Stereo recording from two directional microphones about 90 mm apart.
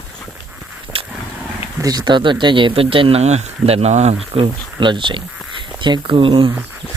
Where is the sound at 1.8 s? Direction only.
50° right (ahead or behind); by 3.2 s 85° right.